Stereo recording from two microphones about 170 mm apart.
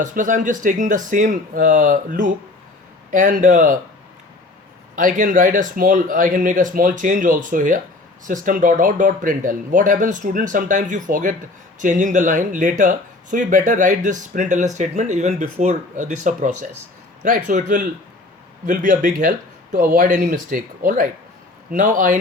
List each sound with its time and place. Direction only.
0.0 s speech: 50° right (ahead or behind)
4.9 s speech: 50° right (ahead or behind)